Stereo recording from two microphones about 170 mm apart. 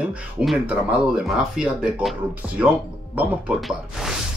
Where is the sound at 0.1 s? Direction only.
5° right (ahead or behind).